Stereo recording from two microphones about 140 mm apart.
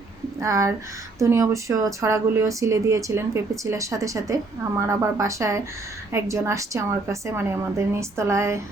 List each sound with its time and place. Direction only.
0.3 s speech: 20° right (ahead or behind)